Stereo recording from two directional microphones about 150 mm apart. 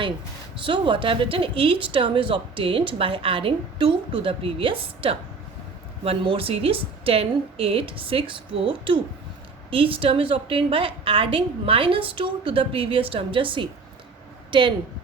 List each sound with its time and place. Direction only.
0.6 s a woman's voice: 35° right (ahead or behind)